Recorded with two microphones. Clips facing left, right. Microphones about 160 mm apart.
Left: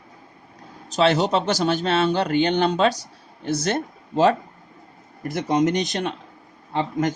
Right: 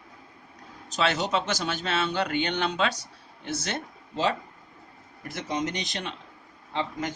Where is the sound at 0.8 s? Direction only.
35° left (ahead or behind).